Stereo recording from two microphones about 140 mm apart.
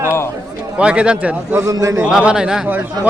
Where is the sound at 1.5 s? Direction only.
25° right (ahead or behind).